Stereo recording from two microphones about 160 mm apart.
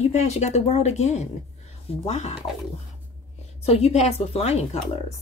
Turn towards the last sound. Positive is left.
turn(degrees=40)  # may be behind; listen again after turning